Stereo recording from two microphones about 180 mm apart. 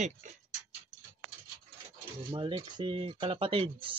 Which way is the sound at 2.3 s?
25° right (ahead or behind).